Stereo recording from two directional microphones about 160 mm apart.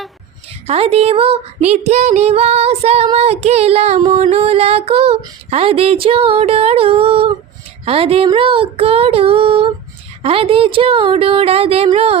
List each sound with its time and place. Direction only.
0.7 s female singing: 40° right (ahead or behind)